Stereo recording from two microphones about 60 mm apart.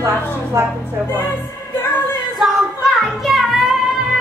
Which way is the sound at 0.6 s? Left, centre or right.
Right.